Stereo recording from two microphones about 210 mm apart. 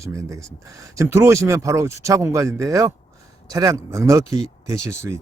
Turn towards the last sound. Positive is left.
turn(degrees=-15)  # may be behind; listen again after turning